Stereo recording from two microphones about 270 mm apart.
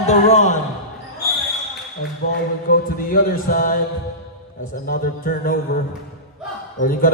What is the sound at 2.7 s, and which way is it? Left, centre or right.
A man's voice, left.